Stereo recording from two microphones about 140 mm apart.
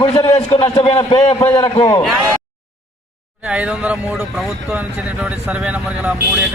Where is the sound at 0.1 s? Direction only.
40° left (ahead or behind).